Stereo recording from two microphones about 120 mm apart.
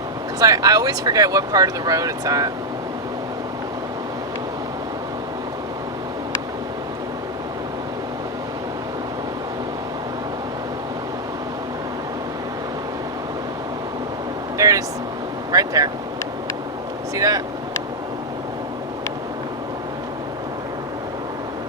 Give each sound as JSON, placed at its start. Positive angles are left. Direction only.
{"t": 0.3, "sound": "speech", "side_deg": -30}
{"t": 14.6, "sound": "a sound", "side_deg": -30}
{"t": 15.5, "sound": "vehicle", "side_deg": -30}
{"t": 17.2, "sound": "vehicle", "side_deg": -30}